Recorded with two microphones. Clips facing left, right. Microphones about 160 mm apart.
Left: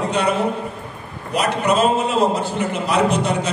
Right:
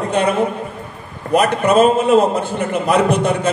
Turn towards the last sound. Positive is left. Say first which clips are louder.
# right 3 dB
turn(degrees=-55)  # may be behind; listen again after turning